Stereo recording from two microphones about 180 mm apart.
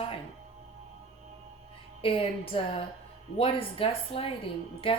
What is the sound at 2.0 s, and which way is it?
Speech, 30° left (ahead or behind).